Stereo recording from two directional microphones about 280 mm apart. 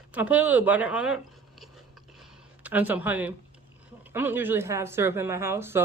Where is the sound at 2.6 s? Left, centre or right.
Centre.